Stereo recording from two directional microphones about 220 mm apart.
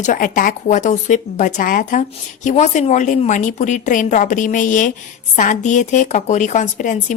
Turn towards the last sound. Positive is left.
turn(degrees=35)  # may be behind; listen again after turning